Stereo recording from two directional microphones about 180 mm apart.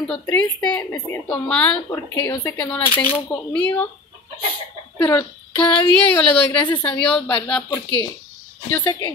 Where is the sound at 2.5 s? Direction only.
10° left (ahead or behind).